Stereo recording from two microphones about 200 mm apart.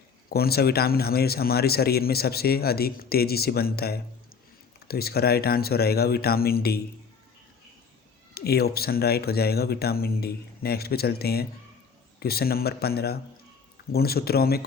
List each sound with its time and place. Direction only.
0.3 s speech: 50° left (ahead or behind)
8.4 s speech: 50° left (ahead or behind)